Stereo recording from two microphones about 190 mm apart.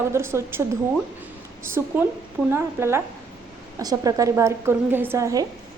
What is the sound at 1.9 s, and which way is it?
A woman's voice, 10° right (ahead or behind).